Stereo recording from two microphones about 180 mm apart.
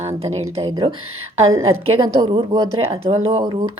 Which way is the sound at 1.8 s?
30° right (ahead or behind).